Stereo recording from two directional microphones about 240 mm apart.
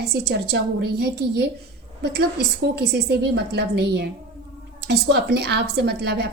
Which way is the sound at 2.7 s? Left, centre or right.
Right.